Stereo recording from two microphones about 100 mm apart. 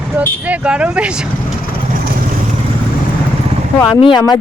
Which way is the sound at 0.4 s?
15° right (ahead or behind).